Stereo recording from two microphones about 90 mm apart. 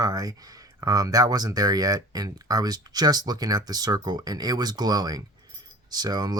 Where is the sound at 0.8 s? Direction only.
40° right (ahead or behind).